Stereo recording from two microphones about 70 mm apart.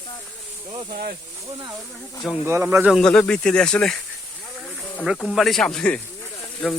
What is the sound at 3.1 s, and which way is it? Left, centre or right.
Speech, centre.